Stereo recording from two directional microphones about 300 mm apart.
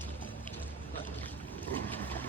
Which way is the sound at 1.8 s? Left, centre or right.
Centre.